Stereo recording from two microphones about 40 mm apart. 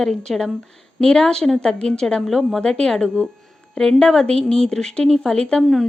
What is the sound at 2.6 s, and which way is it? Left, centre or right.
Speech, centre.